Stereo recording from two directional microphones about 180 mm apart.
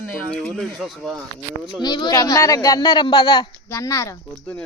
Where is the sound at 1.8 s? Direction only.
25° left (ahead or behind).